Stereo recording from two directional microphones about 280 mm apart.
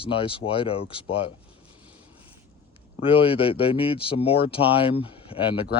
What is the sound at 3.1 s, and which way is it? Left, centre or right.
Speech, centre.